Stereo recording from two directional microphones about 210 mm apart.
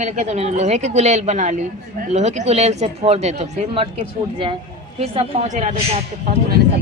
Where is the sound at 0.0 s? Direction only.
35° right (ahead or behind).